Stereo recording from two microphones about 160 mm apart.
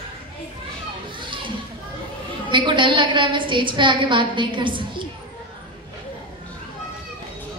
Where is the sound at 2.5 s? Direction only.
30° right (ahead or behind).